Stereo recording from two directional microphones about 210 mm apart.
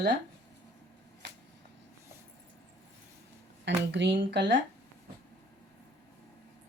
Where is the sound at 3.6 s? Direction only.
55° right (ahead or behind).